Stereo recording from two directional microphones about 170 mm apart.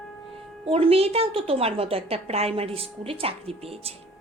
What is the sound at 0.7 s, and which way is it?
A woman's voice, 35° right (ahead or behind).